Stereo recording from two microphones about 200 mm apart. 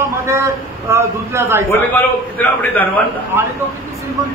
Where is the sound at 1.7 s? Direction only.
10° left (ahead or behind).